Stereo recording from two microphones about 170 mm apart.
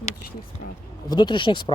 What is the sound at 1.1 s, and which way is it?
Speech, 25° left (ahead or behind).